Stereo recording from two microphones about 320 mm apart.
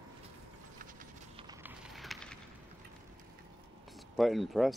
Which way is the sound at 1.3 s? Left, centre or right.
Centre.